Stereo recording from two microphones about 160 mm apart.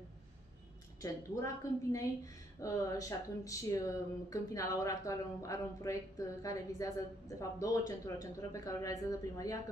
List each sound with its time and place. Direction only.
1.0 s speech: 20° left (ahead or behind)